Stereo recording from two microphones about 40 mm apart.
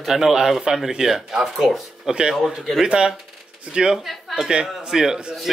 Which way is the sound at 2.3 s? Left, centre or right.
Centre.